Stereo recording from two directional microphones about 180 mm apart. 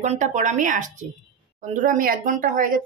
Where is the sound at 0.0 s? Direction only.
40° right (ahead or behind).